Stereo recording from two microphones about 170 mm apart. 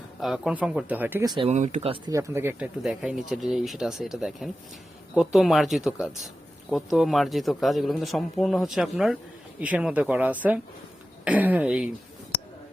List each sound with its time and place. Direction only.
0.2 s speech: centre (ahead or behind)
1.2 s speech: 25° right (ahead or behind)
1.5 s speech: 45° right (ahead or behind)
2.0 s speech: 20° right (ahead or behind)